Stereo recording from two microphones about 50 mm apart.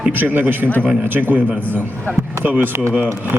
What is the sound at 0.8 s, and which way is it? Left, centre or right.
Speech, right.